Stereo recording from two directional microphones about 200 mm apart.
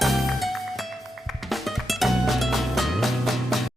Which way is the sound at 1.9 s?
Centre (ahead or behind).